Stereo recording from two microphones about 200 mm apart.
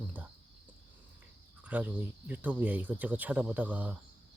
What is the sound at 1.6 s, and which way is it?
Speech, 5° right (ahead or behind).